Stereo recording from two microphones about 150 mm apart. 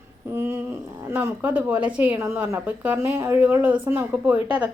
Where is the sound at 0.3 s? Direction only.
15° right (ahead or behind).